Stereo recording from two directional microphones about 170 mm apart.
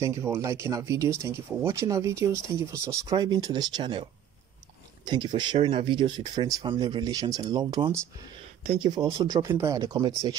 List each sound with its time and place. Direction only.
0.0 s speech: 15° right (ahead or behind)